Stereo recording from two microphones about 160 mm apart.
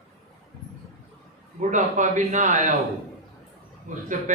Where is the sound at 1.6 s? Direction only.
50° right (ahead or behind).